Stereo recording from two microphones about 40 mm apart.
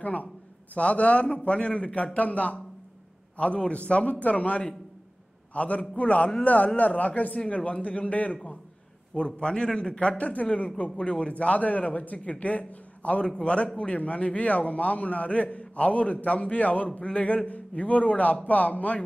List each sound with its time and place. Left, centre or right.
0.0 s a man's voice: left
9.1 s a man's voice: left